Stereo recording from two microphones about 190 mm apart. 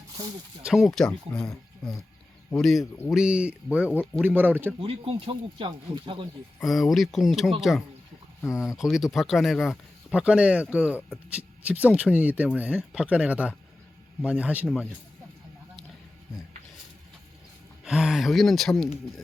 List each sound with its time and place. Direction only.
0.6 s speech: 5° right (ahead or behind)
3.8 s speech: 10° left (ahead or behind)
4.2 s speech: 10° right (ahead or behind)
4.8 s speech: 30° right (ahead or behind)
6.6 s speech: centre (ahead or behind)
8.4 s speech: 15° left (ahead or behind)
8.8 s speech: centre (ahead or behind)
17.8 s speech: 5° right (ahead or behind)